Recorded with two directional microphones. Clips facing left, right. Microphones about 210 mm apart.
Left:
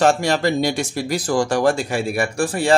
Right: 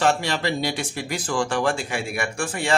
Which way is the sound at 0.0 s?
45° left (ahead or behind).